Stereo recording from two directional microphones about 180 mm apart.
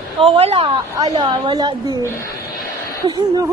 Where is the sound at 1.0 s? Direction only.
25° right (ahead or behind).